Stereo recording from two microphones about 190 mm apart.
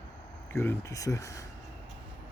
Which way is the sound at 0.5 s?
15° left (ahead or behind).